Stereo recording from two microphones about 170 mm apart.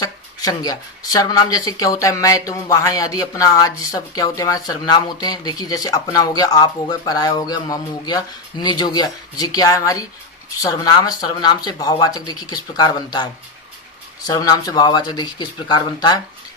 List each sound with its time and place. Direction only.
0.0 s speech: 20° left (ahead or behind)
14.3 s speech: 20° left (ahead or behind)